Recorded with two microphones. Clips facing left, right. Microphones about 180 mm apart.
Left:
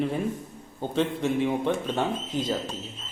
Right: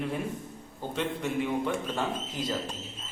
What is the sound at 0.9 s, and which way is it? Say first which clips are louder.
Speech: left 5 dB; 30° left (ahead or behind).